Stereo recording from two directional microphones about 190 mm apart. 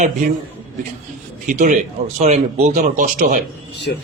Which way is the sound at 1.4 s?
45° right (ahead or behind).